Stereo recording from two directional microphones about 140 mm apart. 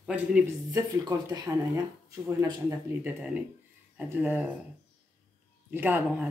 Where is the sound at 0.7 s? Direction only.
25° right (ahead or behind).